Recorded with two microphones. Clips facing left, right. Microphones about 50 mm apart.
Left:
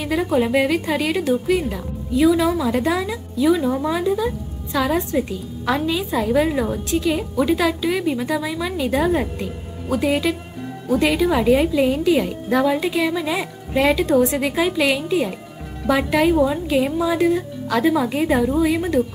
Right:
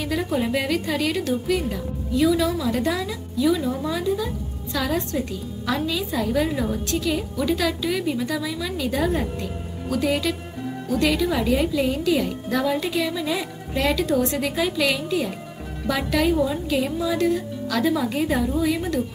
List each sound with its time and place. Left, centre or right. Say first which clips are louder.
0.0 s a woman's voice: left 5 dB; centre